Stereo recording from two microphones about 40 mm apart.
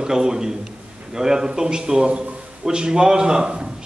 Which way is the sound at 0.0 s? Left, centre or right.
Centre.